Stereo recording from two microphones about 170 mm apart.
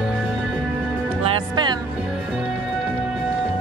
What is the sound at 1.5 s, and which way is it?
Music, 25° right (ahead or behind).